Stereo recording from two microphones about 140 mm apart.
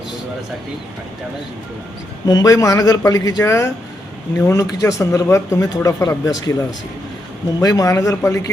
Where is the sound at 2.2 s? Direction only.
25° left (ahead or behind).